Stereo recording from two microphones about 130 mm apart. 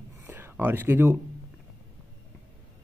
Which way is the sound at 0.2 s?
20° right (ahead or behind).